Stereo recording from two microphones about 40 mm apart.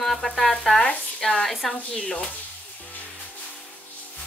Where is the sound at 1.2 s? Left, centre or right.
Centre.